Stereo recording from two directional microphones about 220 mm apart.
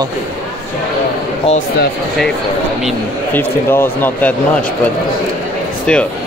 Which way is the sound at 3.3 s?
10° left (ahead or behind).